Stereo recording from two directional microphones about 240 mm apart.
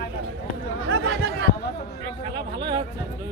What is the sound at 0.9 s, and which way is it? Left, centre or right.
Chatter, right.